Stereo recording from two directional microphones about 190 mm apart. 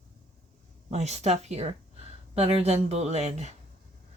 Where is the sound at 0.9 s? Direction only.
35° right (ahead or behind).